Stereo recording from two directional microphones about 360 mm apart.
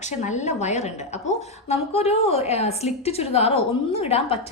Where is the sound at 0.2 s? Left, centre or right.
Centre.